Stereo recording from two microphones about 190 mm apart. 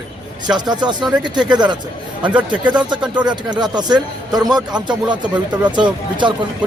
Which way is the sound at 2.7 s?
25° right (ahead or behind).